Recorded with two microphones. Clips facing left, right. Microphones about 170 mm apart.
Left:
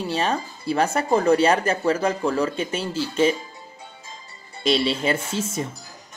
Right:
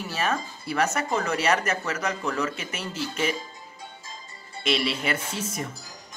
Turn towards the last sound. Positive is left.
turn(degrees=25)  # may be behind; listen again after turning